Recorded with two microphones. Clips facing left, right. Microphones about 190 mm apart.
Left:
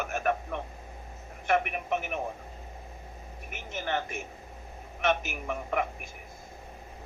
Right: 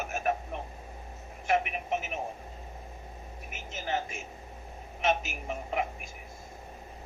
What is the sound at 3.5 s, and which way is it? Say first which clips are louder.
A man's voice: left 1 dB; 60° left (ahead or behind).